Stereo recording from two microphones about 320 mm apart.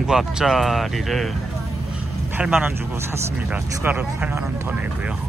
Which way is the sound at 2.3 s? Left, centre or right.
Centre.